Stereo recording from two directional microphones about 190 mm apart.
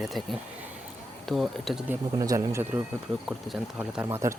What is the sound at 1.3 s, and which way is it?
Speech, centre (ahead or behind).